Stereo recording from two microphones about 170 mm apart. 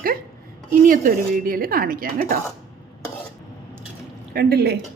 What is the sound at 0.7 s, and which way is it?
A woman's voice, 50° right (ahead or behind).